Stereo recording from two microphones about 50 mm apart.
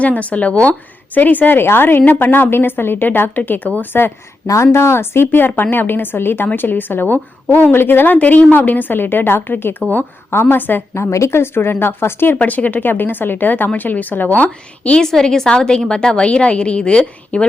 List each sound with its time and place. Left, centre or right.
0.0 s a woman's voice: left
4.4 s speech: left
5.3 s a woman's voice: left
10.9 s speech: left
11.3 s a woman's voice: left
12.4 s a woman's voice: left
15.0 s a woman's voice: centre